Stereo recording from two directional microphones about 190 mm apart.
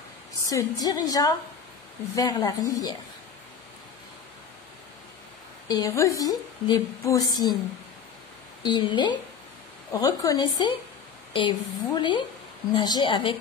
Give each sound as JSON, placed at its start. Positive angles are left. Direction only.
{"t": 0.5, "sound": "a woman's voice", "side_deg": 20}
{"t": 5.7, "sound": "a woman's voice", "side_deg": 20}
{"t": 8.6, "sound": "a woman's voice", "side_deg": 25}